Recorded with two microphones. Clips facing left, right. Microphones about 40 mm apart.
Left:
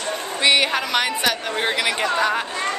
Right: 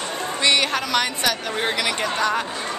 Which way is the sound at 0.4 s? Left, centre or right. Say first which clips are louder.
Left 2 dB; centre.